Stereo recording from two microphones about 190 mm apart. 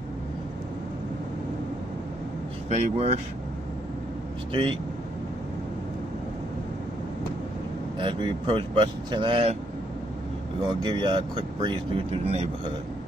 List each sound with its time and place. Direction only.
2.7 s speech: 35° right (ahead or behind)
4.5 s speech: 25° right (ahead or behind)
8.0 s speech: 25° right (ahead or behind)
10.8 s speech: 25° right (ahead or behind)